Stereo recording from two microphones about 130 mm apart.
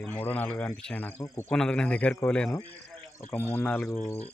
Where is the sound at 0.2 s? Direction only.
15° left (ahead or behind).